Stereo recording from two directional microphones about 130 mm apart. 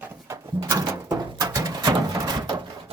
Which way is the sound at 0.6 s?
30° right (ahead or behind).